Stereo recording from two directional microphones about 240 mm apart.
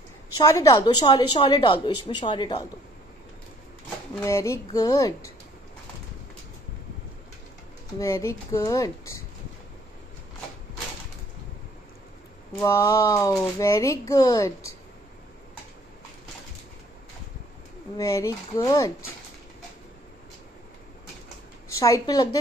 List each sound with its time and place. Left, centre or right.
0.4 s a child's voice: centre
4.1 s a child's voice: centre
8.0 s a child's voice: centre
12.5 s a child's voice: centre
17.9 s a child's voice: centre
21.6 s a woman's voice: centre